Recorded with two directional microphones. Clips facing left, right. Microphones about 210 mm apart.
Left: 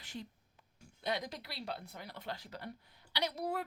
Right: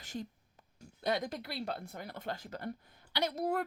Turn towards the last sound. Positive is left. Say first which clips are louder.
# right 4 dB
turn(degrees=-50)  # may be behind; listen again after turning